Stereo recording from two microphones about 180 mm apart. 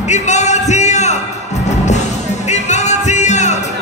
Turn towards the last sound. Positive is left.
turn(degrees=40)  # may be behind; listen again after turning